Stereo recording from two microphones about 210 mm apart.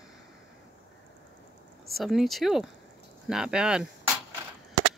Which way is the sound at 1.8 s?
Centre (ahead or behind).